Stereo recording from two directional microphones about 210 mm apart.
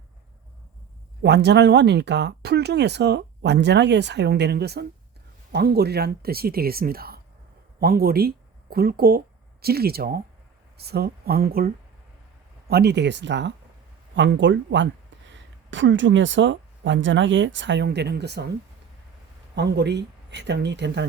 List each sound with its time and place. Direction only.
1.2 s speech: 55° right (ahead or behind)
19.5 s speech: 55° right (ahead or behind)